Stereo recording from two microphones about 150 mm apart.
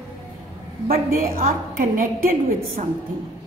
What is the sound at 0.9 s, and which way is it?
A woman's voice, 75° right (ahead or behind).